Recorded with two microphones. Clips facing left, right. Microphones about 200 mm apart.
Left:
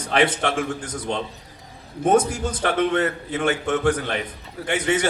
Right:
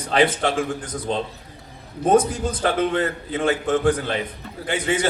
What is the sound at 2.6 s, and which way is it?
A man's voice, 30° right (ahead or behind).